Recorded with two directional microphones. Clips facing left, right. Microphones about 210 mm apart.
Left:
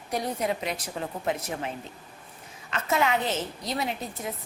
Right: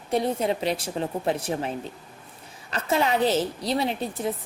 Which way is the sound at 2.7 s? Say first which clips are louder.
Right 2 dB; 35° right (ahead or behind).